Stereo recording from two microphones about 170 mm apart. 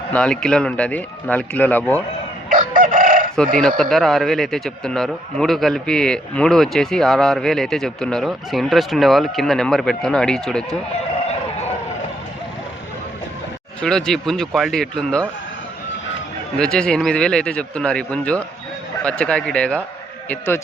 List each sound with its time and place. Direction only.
0.1 s speech: 5° left (ahead or behind)
2.5 s chicken: 55° right (ahead or behind)
3.8 s a man's voice: centre (ahead or behind)
13.8 s a man's voice: 5° left (ahead or behind)
16.6 s a man's voice: 5° left (ahead or behind)